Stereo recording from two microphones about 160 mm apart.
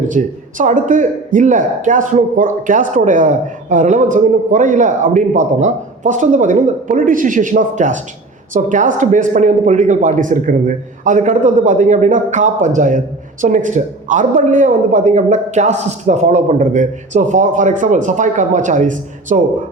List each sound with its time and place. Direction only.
0.1 s speech: 55° right (ahead or behind)